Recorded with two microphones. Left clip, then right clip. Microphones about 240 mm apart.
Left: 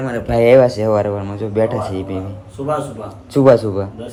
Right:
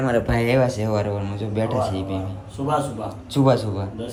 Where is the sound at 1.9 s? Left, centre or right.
Centre.